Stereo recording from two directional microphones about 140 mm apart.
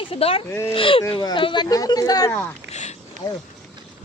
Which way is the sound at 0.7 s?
40° left (ahead or behind).